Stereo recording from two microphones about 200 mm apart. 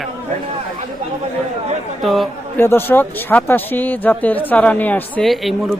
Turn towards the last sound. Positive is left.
turn(degrees=0)  # may be behind; listen again after turning